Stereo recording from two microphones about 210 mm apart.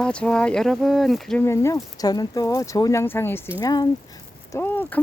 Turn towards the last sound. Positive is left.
turn(degrees=10)  # may be behind; listen again after turning